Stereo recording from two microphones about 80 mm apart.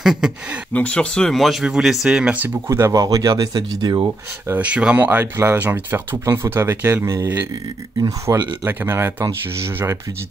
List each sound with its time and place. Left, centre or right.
0.0 s speech: centre
0.7 s speech: centre
1.4 s speech: centre
2.3 s speech: right
2.9 s speech: right
4.5 s speech: centre
8.0 s speech: right
8.6 s speech: right